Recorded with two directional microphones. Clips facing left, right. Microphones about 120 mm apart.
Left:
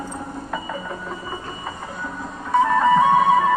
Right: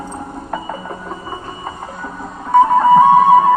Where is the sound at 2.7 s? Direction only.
35° right (ahead or behind).